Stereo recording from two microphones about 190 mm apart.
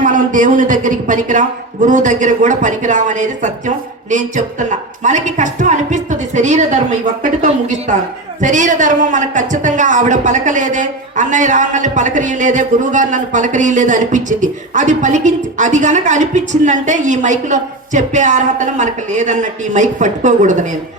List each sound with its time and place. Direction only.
0.0 s a woman's voice: 45° right (ahead or behind)